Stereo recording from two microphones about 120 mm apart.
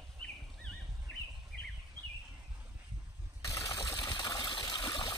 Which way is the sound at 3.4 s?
25° left (ahead or behind).